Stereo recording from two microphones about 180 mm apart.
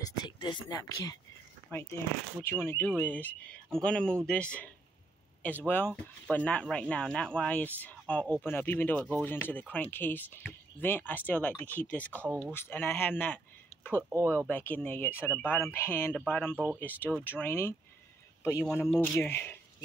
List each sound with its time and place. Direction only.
0.0 s speech: 25° left (ahead or behind)
14.5 s speech: 10° left (ahead or behind)